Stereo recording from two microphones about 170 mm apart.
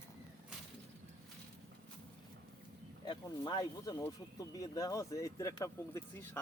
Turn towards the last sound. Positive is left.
turn(degrees=20)  # may be behind; listen again after turning